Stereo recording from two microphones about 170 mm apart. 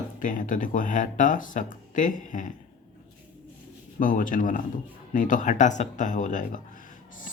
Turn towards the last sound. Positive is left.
turn(degrees=50)  # may be behind; listen again after turning